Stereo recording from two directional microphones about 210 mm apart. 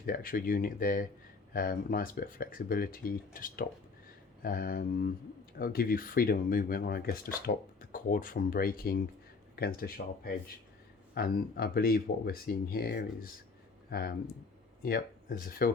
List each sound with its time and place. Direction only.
0.0 s speech: 45° left (ahead or behind)